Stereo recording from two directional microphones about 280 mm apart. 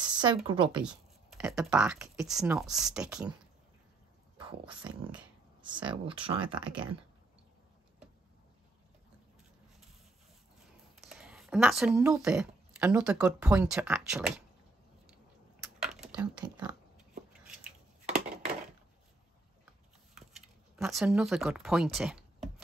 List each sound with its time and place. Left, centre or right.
0.0 s a sound: centre
0.5 s speech: centre
0.8 s speech: centre
4.4 s dog: centre
5.6 s speech: centre
11.0 s speech: centre
15.6 s a sound: centre
16.4 s speech: centre
20.2 s a sound: centre